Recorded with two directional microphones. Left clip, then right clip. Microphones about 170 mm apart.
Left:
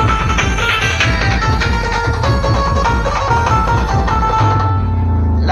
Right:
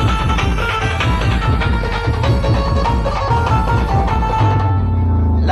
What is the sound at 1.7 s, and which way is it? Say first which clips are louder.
Music: left 4 dB; 10° left (ahead or behind).